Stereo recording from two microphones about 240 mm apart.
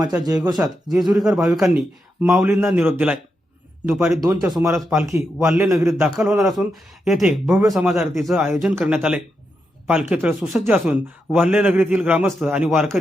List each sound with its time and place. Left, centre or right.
0.0 s speech: centre
0.9 s a man's voice: centre
4.7 s a man's voice: centre